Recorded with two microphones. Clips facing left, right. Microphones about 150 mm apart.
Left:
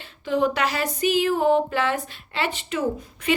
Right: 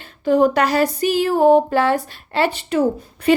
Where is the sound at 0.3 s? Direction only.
45° right (ahead or behind).